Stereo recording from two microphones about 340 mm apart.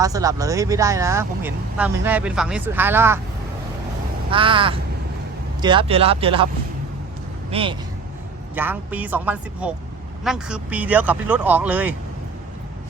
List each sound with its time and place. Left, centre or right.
0.0 s speech: centre
4.3 s speech: centre
7.5 s speech: centre